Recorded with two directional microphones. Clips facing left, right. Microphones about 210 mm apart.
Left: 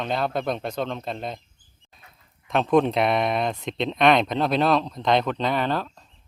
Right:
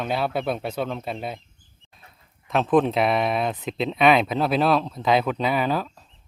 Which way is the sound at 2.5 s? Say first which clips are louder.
Even; centre (ahead or behind).